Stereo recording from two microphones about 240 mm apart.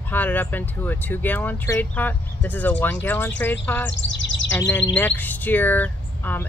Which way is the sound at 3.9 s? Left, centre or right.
Left.